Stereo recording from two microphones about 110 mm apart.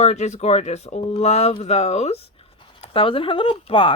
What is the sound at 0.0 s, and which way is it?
Speech, 90° left.